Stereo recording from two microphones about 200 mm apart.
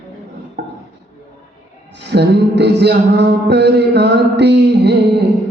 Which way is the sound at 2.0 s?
60° right (ahead or behind).